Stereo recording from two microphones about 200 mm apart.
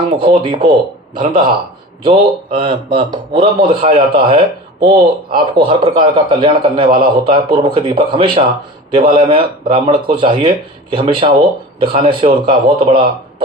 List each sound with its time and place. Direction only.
0.2 s a man's voice: 25° right (ahead or behind)